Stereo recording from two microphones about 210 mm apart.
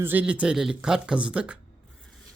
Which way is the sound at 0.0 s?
10° right (ahead or behind).